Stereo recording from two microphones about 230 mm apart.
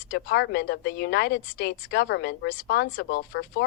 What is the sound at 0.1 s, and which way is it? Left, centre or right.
Speech, left.